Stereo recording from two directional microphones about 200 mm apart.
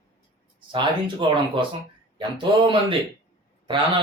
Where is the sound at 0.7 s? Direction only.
25° right (ahead or behind).